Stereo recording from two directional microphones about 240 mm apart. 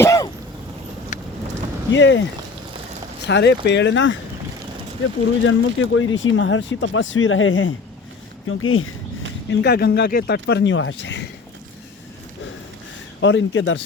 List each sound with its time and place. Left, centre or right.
0.0 s throat clearing: centre
1.9 s speech: left
3.2 s speech: left
5.4 s speech: left
9.5 s speech: left
13.2 s speech: left